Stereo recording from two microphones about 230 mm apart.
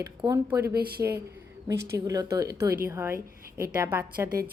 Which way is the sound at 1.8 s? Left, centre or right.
Centre.